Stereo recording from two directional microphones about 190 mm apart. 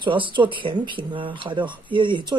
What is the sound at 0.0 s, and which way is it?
Speech, 25° right (ahead or behind).